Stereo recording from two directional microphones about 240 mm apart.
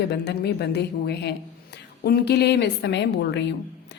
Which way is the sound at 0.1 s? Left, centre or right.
Left.